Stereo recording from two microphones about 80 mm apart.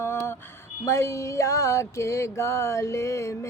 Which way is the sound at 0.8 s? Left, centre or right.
Left.